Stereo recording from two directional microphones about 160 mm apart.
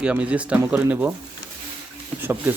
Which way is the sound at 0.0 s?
10° right (ahead or behind).